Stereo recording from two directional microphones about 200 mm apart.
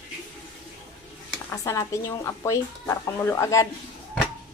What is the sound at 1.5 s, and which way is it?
Speech, 15° left (ahead or behind).